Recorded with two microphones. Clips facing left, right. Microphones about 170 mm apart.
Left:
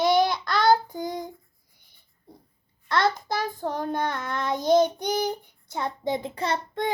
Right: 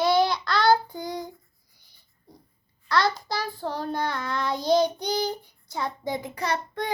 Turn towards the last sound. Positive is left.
turn(degrees=25)  # may be behind; listen again after turning